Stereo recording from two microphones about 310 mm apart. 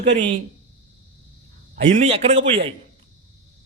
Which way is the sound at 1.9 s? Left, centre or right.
Right.